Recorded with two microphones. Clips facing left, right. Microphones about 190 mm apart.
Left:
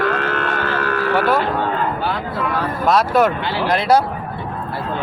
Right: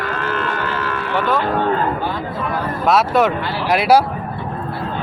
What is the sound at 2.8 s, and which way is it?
Speech, centre (ahead or behind).